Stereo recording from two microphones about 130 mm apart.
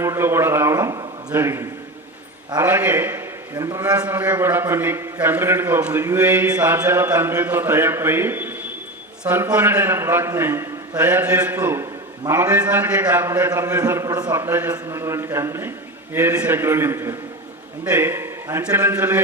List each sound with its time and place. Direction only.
0.0 s a man's voice: 20° right (ahead or behind)
4.0 s a man's voice: 15° right (ahead or behind); by 14.3 s 30° right (ahead or behind)
14.3 s a man's voice: 20° right (ahead or behind)